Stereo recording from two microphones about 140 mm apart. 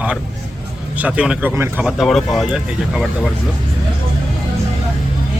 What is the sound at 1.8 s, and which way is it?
A man's voice, centre (ahead or behind).